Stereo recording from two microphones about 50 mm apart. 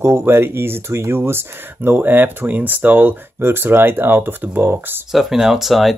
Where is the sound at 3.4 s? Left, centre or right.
Right.